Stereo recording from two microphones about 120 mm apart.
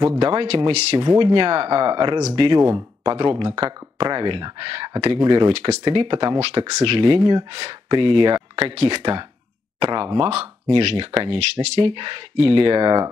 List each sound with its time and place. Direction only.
0.2 s speech: 40° right (ahead or behind); by 0.9 s 55° right (ahead or behind)
0.9 s speech: 40° right (ahead or behind)
2.6 s speech: 25° right (ahead or behind)
10.7 s speech: 45° right (ahead or behind)
11.3 s speech: 55° right (ahead or behind)
11.9 s speech: 40° right (ahead or behind)